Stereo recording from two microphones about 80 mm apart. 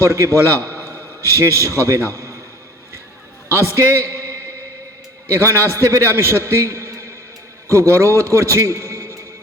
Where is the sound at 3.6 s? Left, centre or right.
Right.